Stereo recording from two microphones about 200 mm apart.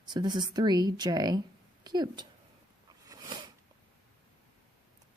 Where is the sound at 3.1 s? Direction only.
20° right (ahead or behind).